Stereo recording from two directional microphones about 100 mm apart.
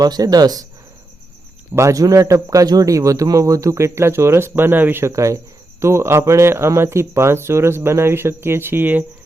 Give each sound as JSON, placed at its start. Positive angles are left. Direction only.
{"t": 0.0, "sound": "a man's voice", "side_deg": -40}
{"t": 1.7, "sound": "a man's voice", "side_deg": -30}